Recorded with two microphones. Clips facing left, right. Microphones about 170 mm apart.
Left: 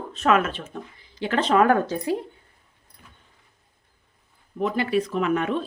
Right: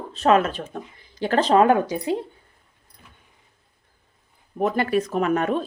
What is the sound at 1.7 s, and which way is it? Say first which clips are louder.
Speech: right 1 dB; 15° right (ahead or behind).